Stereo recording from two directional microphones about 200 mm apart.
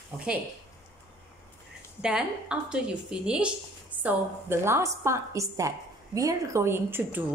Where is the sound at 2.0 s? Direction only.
5° right (ahead or behind).